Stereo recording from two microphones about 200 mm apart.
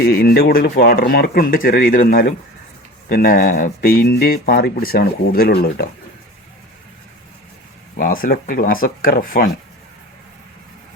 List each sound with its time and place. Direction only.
0.0 s speech: 50° left (ahead or behind)
7.9 s speech: 45° left (ahead or behind)